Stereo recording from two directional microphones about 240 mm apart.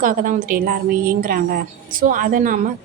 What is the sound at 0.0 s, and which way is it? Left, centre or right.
A woman's voice, right.